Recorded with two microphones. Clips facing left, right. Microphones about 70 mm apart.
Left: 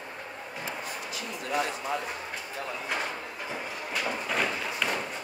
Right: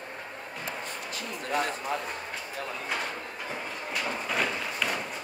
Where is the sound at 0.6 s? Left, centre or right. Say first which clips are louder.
Even; right.